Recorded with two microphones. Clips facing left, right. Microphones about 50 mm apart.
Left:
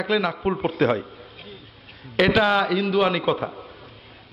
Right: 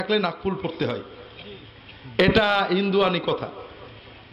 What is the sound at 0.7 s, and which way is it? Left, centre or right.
Speech, left.